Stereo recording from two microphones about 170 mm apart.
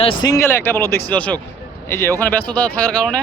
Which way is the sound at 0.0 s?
25° left (ahead or behind).